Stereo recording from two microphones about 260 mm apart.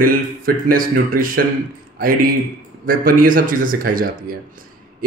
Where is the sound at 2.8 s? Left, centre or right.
Right.